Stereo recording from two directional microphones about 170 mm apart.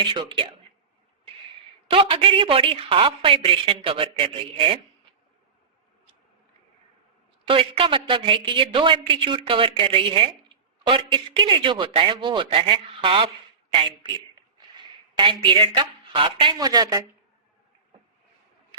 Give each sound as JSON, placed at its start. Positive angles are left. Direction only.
{"t": 0.0, "sound": "a woman's voice", "side_deg": -30}
{"t": 1.9, "sound": "a woman's voice", "side_deg": -30}
{"t": 7.4, "sound": "a woman's voice", "side_deg": -30}
{"t": 14.8, "sound": "a woman's voice", "side_deg": -25}